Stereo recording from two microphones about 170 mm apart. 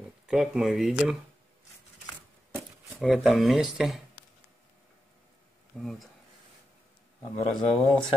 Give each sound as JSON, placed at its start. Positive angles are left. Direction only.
{"t": 0.3, "sound": "speech", "side_deg": -5}
{"t": 3.0, "sound": "speech", "side_deg": 0}
{"t": 5.8, "sound": "speech", "side_deg": 0}
{"t": 7.3, "sound": "speech", "side_deg": 30}